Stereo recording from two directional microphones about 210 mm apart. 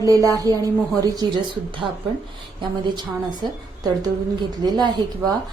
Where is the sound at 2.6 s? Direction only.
20° right (ahead or behind).